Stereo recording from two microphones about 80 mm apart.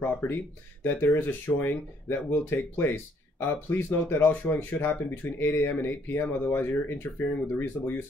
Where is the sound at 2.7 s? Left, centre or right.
Left.